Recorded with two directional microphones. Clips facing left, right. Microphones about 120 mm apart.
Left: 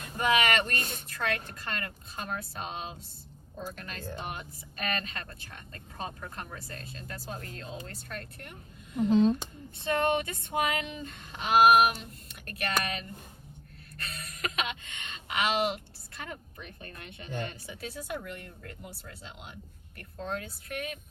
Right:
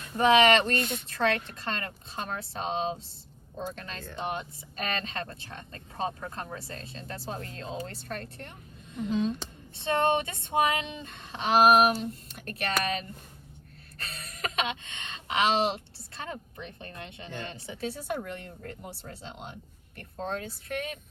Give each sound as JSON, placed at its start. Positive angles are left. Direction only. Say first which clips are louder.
{"t": 0.2, "sound": "speech", "louder": "right 6 dB", "side_deg": -25}
{"t": 4.2, "sound": "speech", "louder": "right 5 dB", "side_deg": -25}
{"t": 9.0, "sound": "speech", "louder": "left 5 dB", "side_deg": 35}
{"t": 9.7, "sound": "speech", "louder": "right 2 dB", "side_deg": -25}